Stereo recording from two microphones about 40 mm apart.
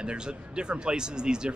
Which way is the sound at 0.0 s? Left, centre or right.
Right.